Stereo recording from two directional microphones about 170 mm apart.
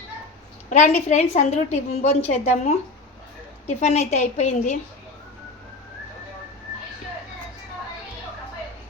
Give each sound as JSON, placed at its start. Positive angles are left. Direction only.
{"t": 0.7, "sound": "a woman's voice", "side_deg": 40}